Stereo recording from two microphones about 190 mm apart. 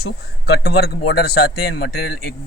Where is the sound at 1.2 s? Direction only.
55° left (ahead or behind).